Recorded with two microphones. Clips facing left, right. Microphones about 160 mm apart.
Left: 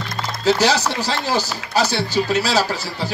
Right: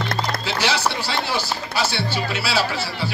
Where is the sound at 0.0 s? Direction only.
65° right (ahead or behind).